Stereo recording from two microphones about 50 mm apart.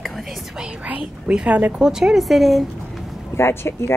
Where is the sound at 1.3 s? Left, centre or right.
Right.